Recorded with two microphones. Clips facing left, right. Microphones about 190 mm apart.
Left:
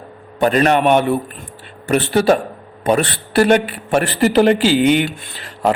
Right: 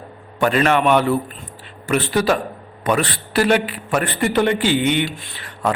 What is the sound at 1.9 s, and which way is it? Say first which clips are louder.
Speech: left 4 dB; 30° left (ahead or behind).